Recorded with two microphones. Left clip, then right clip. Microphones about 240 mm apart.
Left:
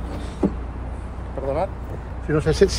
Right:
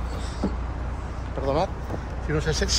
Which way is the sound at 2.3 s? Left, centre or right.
Left.